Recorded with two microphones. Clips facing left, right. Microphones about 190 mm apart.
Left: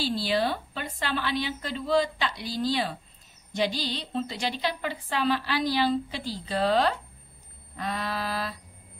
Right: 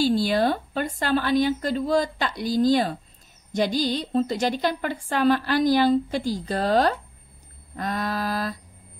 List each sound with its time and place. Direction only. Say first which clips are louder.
0.0 s a woman's voice: right 6 dB; 45° right (ahead or behind)